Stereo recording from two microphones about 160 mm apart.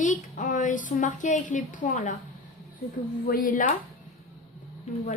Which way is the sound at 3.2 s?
60° left (ahead or behind).